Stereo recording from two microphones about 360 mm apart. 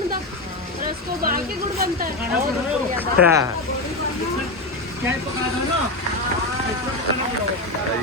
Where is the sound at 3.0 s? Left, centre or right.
Centre.